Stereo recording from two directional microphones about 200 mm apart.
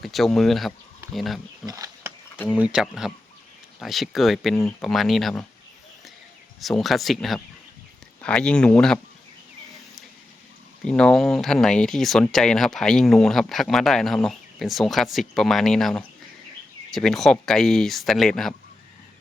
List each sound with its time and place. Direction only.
0.0 s speech: centre (ahead or behind)
1.6 s a sound: 15° right (ahead or behind)
2.5 s speech: 5° right (ahead or behind)
6.6 s speech: centre (ahead or behind)
10.8 s speech: 5° left (ahead or behind)